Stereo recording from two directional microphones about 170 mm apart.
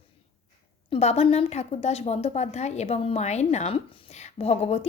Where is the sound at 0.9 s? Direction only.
35° left (ahead or behind).